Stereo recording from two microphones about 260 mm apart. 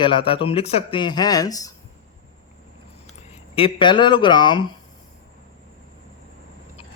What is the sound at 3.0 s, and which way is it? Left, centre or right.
Speech, left.